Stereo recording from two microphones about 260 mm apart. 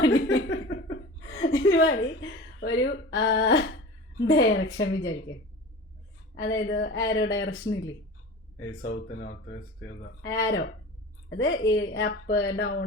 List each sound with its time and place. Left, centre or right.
0.0 s a woman's voice: left
6.3 s a woman's voice: left
8.9 s a woman's voice: left